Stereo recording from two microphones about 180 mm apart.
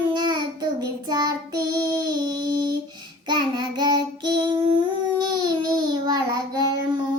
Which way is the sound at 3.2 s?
25° right (ahead or behind).